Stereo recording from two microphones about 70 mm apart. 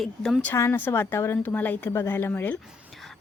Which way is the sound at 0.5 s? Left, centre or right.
Left.